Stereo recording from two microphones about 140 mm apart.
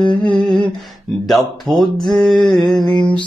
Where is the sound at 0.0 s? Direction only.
10° left (ahead or behind).